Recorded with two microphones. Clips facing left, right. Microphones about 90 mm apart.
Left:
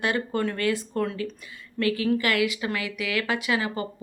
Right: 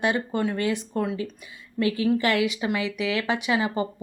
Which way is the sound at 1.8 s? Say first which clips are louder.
Right 1 dB; 25° right (ahead or behind).